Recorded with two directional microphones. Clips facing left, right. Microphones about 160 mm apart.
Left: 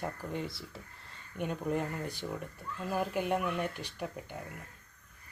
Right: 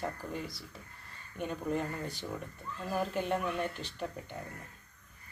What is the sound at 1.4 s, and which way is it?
Speech, 10° left (ahead or behind).